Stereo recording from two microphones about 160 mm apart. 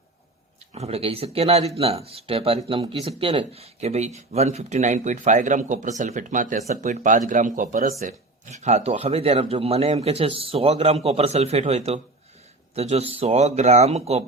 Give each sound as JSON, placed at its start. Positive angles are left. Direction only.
{"t": 0.7, "sound": "speech", "side_deg": -40}
{"t": 7.9, "sound": "speech", "side_deg": -45}